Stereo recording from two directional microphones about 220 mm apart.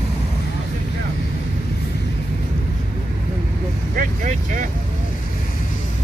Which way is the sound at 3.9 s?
35° right (ahead or behind).